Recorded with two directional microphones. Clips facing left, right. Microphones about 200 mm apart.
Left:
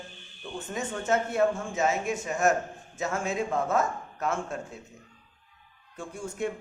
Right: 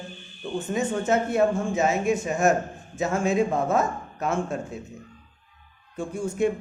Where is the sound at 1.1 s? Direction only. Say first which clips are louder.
Right 2 dB; 15° right (ahead or behind).